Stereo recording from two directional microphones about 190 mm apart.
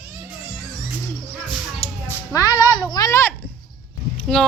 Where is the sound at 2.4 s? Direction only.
20° left (ahead or behind).